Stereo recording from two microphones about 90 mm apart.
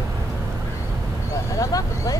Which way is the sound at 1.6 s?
40° left (ahead or behind).